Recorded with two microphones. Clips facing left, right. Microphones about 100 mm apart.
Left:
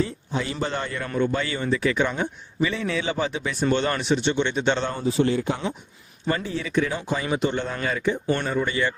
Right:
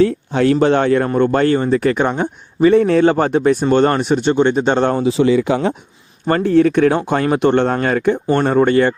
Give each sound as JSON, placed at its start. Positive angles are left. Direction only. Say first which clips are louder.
{"t": 0.0, "sound": "speech", "louder": "right 13 dB", "side_deg": -70}
{"t": 1.0, "sound": "speech", "louder": "right 10 dB", "side_deg": -50}
{"t": 4.9, "sound": "speech", "louder": "right 8 dB", "side_deg": -80}
{"t": 6.2, "sound": "speech", "louder": "right 14 dB", "side_deg": -55}